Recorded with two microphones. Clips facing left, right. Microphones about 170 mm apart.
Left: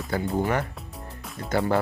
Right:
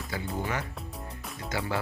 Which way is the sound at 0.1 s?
50° left (ahead or behind).